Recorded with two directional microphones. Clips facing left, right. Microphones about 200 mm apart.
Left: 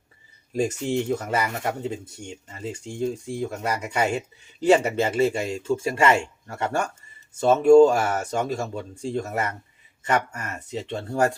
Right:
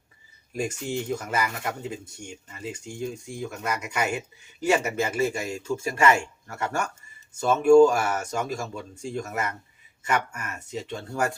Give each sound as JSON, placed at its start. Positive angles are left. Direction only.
{"t": 0.5, "sound": "speech", "side_deg": 30}